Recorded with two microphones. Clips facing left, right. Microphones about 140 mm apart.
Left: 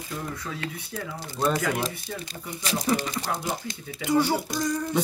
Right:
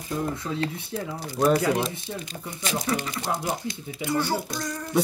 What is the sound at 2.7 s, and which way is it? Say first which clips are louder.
Speech: left 1 dB; 30° left (ahead or behind).